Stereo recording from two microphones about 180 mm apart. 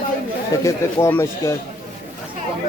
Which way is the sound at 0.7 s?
15° left (ahead or behind).